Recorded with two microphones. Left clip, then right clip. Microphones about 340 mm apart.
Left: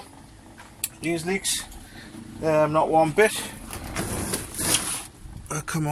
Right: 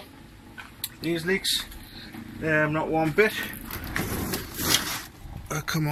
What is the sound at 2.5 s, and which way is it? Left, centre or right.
Speech, centre.